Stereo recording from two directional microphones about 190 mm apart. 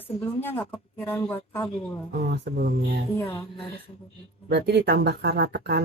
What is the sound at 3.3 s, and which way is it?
Speech, 30° left (ahead or behind).